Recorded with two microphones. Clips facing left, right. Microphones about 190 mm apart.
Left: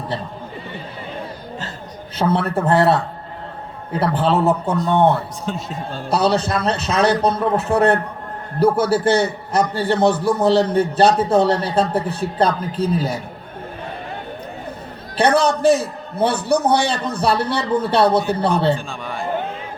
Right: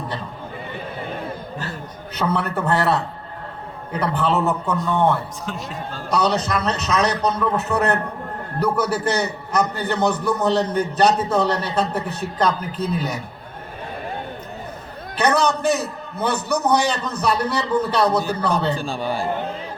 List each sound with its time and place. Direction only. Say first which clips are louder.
2.1 s a man's voice: left 4 dB; 30° left (ahead or behind)
15.2 s a man's voice: left 4 dB; 30° left (ahead or behind)
18.8 s a man's voice: right 4 dB; 35° right (ahead or behind)